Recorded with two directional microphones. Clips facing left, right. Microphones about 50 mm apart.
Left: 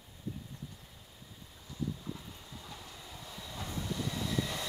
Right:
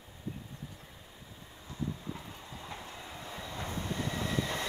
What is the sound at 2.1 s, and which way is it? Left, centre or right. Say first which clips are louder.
Train: right 3 dB; right.